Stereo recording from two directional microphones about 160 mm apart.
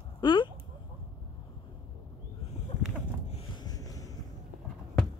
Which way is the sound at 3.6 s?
20° left (ahead or behind).